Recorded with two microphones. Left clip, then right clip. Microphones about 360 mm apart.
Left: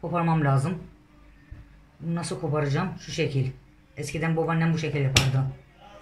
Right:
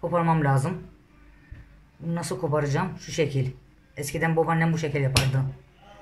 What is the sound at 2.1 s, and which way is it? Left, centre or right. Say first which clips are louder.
Speech: right 2 dB; centre.